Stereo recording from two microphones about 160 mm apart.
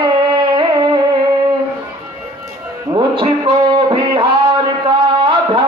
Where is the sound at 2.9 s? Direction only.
30° right (ahead or behind).